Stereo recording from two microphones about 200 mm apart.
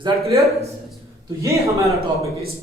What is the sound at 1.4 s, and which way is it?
Speech, 15° right (ahead or behind).